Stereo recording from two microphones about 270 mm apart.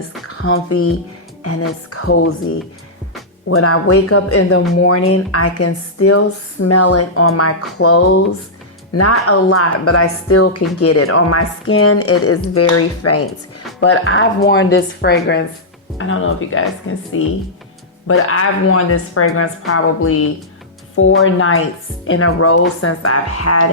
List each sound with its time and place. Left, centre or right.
0.3 s speech: left
3.5 s a woman's voice: left
18.1 s a woman's voice: left